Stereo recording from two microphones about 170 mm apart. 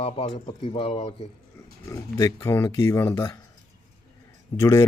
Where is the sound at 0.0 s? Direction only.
30° left (ahead or behind).